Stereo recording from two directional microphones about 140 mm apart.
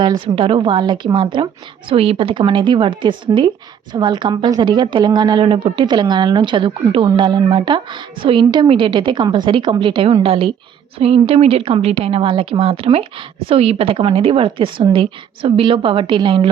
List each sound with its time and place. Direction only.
0.0 s a woman's voice: 35° right (ahead or behind)